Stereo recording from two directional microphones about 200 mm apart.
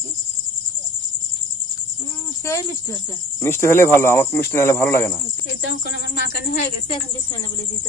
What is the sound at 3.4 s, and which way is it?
Speech, 10° left (ahead or behind).